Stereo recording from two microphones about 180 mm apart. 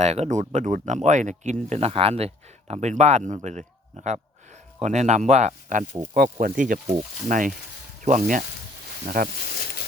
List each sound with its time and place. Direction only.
0.0 s speech: 40° right (ahead or behind); by 9.3 s 55° right (ahead or behind)